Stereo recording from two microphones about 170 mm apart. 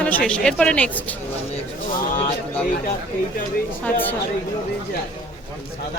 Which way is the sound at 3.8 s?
10° left (ahead or behind).